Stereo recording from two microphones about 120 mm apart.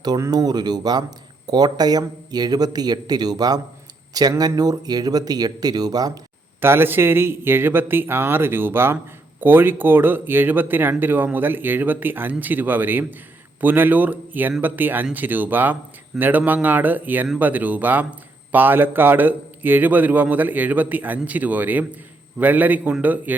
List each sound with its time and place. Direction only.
0.0 s speech: 35° right (ahead or behind)
6.6 s speech: 20° right (ahead or behind)